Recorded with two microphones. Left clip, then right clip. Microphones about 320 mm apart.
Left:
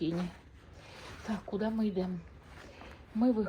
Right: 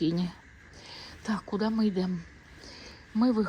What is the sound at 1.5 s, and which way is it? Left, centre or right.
Speech, centre.